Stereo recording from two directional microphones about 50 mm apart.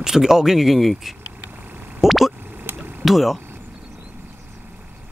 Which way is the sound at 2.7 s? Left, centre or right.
Right.